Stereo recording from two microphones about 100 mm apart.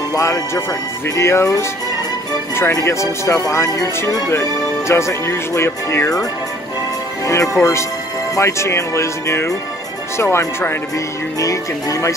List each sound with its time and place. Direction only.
0.1 s music: 35° left (ahead or behind)
1.1 s speech: 25° left (ahead or behind)
7.2 s speech: 30° left (ahead or behind)